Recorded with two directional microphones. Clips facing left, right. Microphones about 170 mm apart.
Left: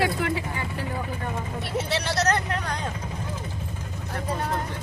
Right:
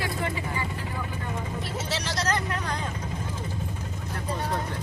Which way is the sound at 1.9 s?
60° left (ahead or behind).